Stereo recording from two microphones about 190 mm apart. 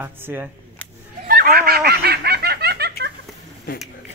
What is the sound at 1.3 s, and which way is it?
Fowl, 50° right (ahead or behind).